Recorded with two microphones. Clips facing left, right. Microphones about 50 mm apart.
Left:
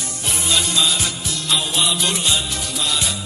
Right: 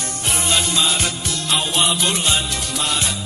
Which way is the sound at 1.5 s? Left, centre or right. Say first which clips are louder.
Right 1 dB; centre.